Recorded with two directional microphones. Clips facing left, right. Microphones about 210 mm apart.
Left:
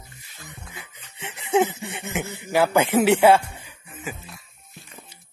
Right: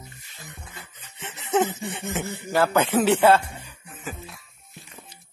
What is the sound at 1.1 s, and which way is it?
Laughter, 10° left (ahead or behind).